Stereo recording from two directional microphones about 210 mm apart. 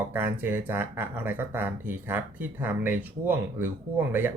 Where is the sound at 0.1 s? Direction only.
10° right (ahead or behind).